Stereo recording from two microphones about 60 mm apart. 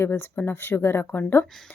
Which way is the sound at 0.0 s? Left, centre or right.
Left.